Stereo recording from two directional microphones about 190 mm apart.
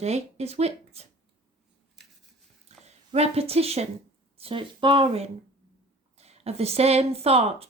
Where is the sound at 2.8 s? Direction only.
35° right (ahead or behind).